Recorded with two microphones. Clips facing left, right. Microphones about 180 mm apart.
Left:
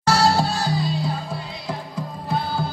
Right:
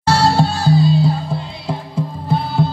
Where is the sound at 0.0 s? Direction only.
25° right (ahead or behind).